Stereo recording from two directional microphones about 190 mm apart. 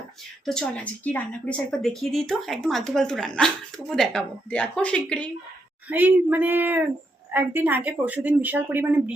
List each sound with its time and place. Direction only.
1.0 s speech: 5° left (ahead or behind)
5.9 s a woman's voice: 10° right (ahead or behind)